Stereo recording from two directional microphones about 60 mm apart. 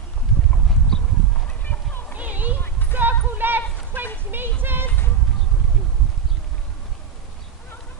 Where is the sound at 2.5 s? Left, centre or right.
Left.